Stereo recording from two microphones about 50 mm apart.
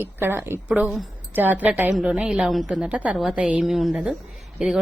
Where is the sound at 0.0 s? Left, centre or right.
Right.